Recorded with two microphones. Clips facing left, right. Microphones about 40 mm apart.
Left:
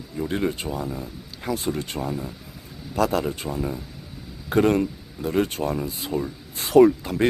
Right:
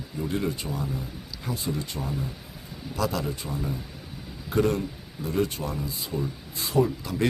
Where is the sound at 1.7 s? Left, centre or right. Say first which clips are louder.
Left 4 dB; left.